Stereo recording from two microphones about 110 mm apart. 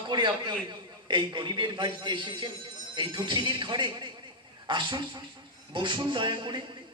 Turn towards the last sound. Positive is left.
turn(degrees=-45)  # may be behind; listen again after turning